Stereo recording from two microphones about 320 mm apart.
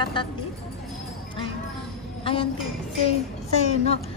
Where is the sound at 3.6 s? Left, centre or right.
Left.